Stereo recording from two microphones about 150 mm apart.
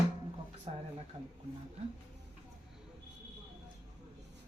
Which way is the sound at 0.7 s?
40° right (ahead or behind).